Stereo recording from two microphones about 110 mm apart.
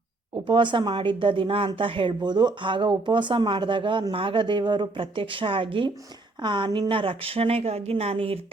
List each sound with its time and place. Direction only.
0.4 s a woman's voice: 45° right (ahead or behind); by 8.5 s 65° right (ahead or behind)